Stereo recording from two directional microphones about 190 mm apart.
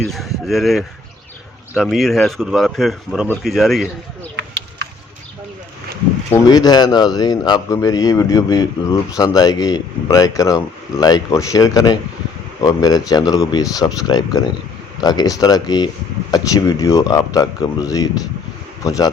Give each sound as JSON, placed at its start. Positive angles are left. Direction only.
{"t": 0.0, "sound": "speech", "side_deg": 0}
{"t": 6.3, "sound": "speech", "side_deg": 20}